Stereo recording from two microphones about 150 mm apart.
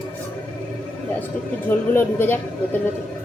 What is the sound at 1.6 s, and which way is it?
Speech, 15° left (ahead or behind).